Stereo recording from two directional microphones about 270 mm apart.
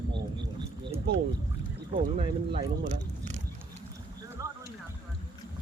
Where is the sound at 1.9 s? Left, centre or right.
Right.